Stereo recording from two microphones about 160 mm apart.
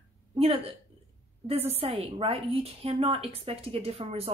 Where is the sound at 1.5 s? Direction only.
40° right (ahead or behind).